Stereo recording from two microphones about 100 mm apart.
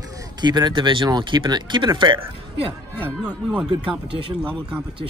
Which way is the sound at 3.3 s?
5° right (ahead or behind).